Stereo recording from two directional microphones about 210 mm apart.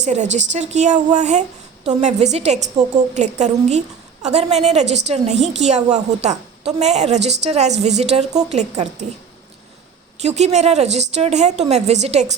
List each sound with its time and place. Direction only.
0.0 s a woman's voice: 35° right (ahead or behind)
10.2 s a woman's voice: 30° right (ahead or behind)